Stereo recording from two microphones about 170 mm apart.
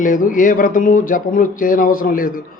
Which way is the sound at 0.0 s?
55° left (ahead or behind).